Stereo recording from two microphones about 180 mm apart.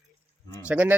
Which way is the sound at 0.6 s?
10° right (ahead or behind).